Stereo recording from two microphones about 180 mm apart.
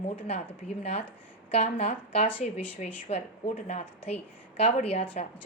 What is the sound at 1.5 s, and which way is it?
Speech, 35° left (ahead or behind).